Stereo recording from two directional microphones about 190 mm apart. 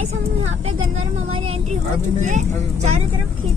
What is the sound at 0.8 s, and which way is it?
Speech, 90° right.